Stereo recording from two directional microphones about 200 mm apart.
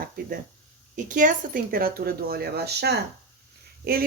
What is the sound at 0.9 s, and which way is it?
A woman's voice, 40° right (ahead or behind).